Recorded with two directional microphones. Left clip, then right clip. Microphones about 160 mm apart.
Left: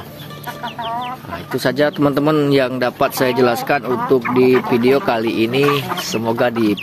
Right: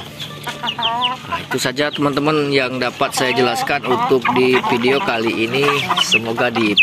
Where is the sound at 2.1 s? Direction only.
40° left (ahead or behind).